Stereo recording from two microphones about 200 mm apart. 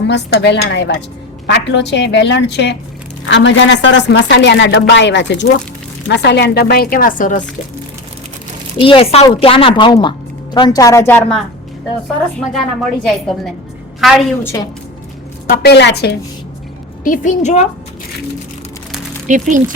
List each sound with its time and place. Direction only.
0.1 s a woman's voice: 60° left (ahead or behind); by 7.4 s 40° left (ahead or behind)
8.8 s a woman's voice: 30° left (ahead or behind); by 11.4 s 5° left (ahead or behind)
12.5 s a woman's voice: centre (ahead or behind)
14.4 s a woman's voice: 15° left (ahead or behind)
15.4 s a woman's voice: 50° left (ahead or behind)
17.0 s a woman's voice: 40° left (ahead or behind)
19.3 s speech: 40° right (ahead or behind)